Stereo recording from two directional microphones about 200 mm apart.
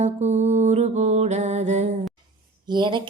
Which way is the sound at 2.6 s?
25° right (ahead or behind).